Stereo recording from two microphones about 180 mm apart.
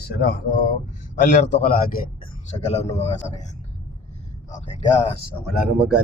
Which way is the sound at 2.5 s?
35° left (ahead or behind).